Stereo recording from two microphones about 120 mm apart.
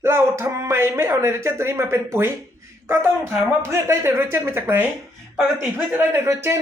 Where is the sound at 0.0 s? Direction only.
20° right (ahead or behind).